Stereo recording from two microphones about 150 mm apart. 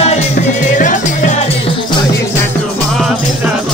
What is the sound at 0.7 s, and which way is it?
Music, 60° left (ahead or behind).